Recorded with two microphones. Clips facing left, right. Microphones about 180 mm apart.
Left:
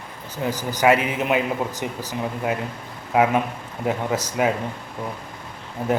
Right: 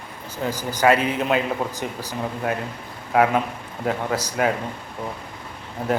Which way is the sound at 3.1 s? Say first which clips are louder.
Even; 20° left (ahead or behind).